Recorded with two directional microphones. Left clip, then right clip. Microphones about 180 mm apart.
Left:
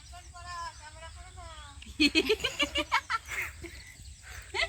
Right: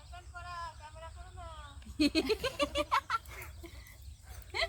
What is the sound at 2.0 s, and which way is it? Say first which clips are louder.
Giggle: left 5 dB; 65° right (ahead or behind).